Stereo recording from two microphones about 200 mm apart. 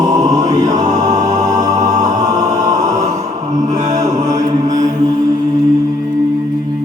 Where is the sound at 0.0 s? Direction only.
20° right (ahead or behind).